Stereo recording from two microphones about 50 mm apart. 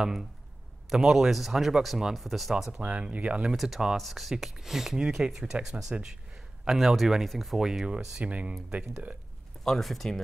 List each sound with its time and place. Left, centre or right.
0.0 s speech: centre
2.8 s speech: right
3.5 s speech: centre
7.8 s speech: centre
8.3 s speech: right
9.7 s speech: centre